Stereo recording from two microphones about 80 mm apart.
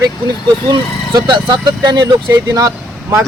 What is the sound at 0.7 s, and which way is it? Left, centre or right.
Speech, right.